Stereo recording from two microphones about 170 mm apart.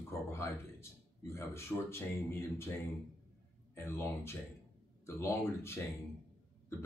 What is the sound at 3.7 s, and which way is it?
A man's voice, 15° left (ahead or behind).